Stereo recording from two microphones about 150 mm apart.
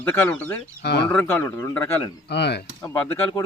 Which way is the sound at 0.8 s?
90° left.